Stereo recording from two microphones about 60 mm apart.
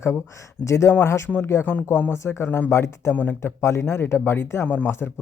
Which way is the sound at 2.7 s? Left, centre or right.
Left.